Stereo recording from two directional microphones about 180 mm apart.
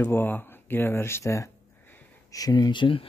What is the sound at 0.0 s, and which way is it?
Speech, 10° left (ahead or behind).